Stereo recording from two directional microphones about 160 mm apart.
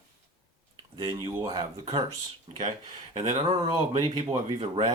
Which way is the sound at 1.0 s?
25° right (ahead or behind).